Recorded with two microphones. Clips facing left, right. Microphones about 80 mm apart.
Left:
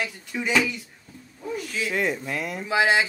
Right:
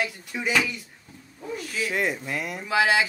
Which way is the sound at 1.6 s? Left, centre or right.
Centre.